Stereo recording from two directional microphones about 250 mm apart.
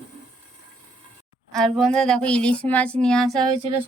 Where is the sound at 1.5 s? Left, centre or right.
Centre.